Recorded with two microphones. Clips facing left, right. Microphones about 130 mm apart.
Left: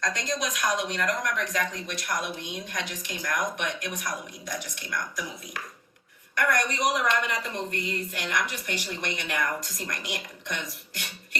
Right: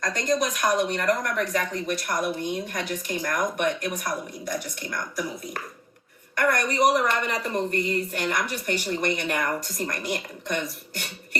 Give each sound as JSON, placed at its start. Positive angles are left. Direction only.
{"t": 0.0, "sound": "a woman's voice", "side_deg": -55}
{"t": 6.3, "sound": "a woman's voice", "side_deg": -50}